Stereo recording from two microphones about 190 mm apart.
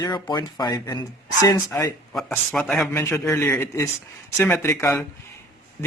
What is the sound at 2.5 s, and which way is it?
Speech, 5° left (ahead or behind).